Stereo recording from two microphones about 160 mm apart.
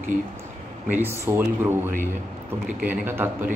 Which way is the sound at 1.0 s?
15° right (ahead or behind).